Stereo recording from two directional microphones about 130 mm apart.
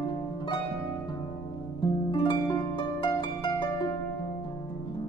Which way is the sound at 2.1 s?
40° left (ahead or behind).